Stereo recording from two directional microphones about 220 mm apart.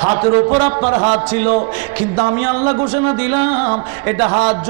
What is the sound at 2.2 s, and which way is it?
Speech, 15° right (ahead or behind).